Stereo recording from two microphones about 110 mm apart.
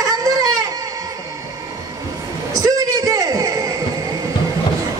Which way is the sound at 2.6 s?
30° right (ahead or behind).